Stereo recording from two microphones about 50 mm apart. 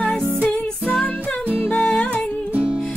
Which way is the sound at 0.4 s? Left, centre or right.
Left.